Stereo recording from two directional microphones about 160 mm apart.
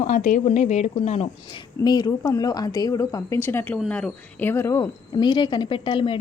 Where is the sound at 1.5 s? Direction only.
25° left (ahead or behind).